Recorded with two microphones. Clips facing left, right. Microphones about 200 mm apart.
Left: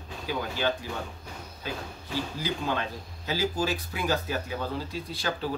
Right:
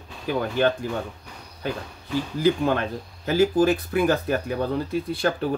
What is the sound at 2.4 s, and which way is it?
Speech, 55° right (ahead or behind).